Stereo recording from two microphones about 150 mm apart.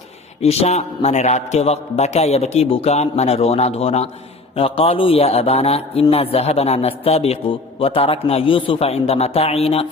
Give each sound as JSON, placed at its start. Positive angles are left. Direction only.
{"t": 0.4, "sound": "a man's voice", "side_deg": 45}